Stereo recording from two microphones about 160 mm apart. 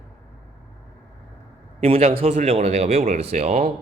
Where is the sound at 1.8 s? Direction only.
35° right (ahead or behind).